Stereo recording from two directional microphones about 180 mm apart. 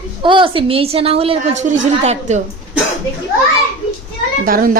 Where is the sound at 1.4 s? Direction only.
40° right (ahead or behind).